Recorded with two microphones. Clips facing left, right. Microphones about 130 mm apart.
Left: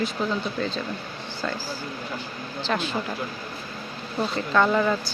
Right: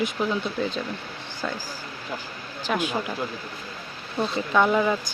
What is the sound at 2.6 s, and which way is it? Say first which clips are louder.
Speech: right 1 dB; 10° right (ahead or behind).